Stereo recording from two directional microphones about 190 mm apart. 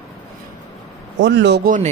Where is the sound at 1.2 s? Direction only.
70° right (ahead or behind).